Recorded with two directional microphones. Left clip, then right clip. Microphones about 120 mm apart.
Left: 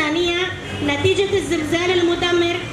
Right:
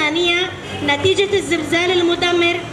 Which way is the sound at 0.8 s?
35° right (ahead or behind).